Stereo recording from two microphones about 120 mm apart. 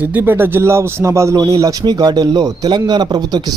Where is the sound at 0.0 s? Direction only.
15° right (ahead or behind).